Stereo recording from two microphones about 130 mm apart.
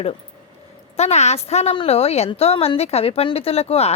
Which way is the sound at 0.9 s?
60° left (ahead or behind).